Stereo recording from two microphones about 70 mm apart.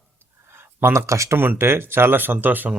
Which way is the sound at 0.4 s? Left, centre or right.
Right.